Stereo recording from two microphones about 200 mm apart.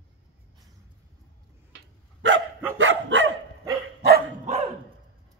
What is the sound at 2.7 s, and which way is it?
Dog, 70° right (ahead or behind).